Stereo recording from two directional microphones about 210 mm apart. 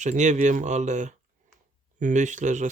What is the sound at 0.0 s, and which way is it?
Speech, 35° right (ahead or behind).